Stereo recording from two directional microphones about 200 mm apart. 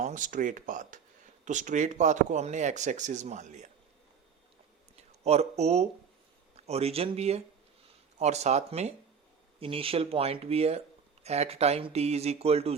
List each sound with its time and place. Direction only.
0.0 s speech: 40° right (ahead or behind)
4.9 s speech: 30° right (ahead or behind)